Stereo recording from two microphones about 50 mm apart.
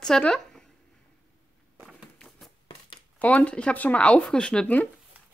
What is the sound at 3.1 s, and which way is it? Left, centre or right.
Speech, left.